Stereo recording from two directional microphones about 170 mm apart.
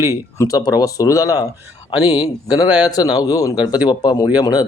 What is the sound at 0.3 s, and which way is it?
A man's voice, 20° left (ahead or behind).